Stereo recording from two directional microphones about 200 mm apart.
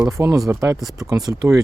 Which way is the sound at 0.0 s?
15° right (ahead or behind).